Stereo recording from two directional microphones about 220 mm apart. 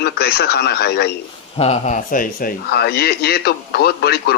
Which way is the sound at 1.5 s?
30° left (ahead or behind).